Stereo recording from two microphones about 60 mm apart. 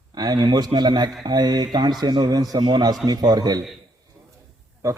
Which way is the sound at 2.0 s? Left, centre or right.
Right.